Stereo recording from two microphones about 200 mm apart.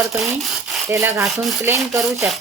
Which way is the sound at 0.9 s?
15° right (ahead or behind).